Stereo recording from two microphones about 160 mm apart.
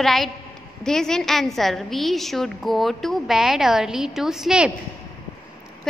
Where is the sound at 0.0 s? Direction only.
Centre (ahead or behind).